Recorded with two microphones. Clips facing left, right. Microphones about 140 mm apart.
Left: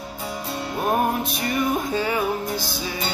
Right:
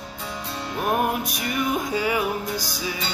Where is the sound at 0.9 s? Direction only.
30° left (ahead or behind).